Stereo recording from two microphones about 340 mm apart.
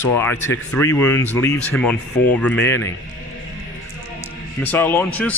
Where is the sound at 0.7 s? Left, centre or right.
Centre.